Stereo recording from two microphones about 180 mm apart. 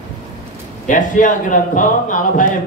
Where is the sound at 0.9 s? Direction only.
45° left (ahead or behind).